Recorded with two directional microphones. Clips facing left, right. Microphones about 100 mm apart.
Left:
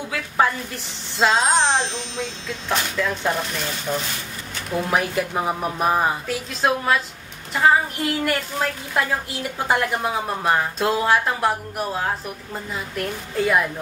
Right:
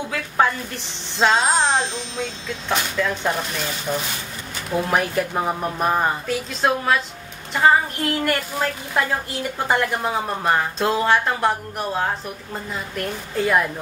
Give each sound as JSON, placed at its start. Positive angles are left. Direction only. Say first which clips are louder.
{"t": 1.1, "sound": "a woman's voice", "louder": "even", "side_deg": 0}